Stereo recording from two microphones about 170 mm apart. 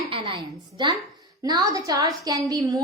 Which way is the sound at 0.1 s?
30° right (ahead or behind).